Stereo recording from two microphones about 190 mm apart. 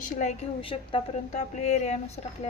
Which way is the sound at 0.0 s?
35° left (ahead or behind).